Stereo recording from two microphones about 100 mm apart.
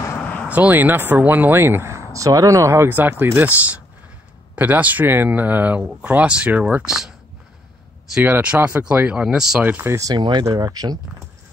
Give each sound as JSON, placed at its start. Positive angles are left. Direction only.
{"t": 0.2, "sound": "vehicle", "side_deg": 20}
{"t": 0.5, "sound": "speech", "side_deg": -15}
{"t": 8.2, "sound": "speech", "side_deg": -15}
{"t": 9.7, "sound": "speech", "side_deg": -25}
{"t": 10.1, "sound": "speech", "side_deg": -50}
{"t": 10.4, "sound": "speech", "side_deg": -40}